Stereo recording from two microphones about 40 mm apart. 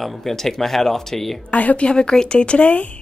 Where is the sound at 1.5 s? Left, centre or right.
Left.